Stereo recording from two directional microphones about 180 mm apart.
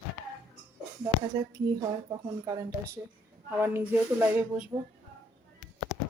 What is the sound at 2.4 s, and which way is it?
Speech, 20° right (ahead or behind).